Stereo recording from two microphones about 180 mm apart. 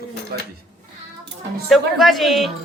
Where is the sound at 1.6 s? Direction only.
Centre (ahead or behind).